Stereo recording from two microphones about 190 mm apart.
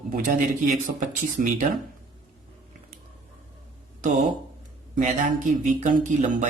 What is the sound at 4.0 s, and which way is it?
Speech, 40° right (ahead or behind).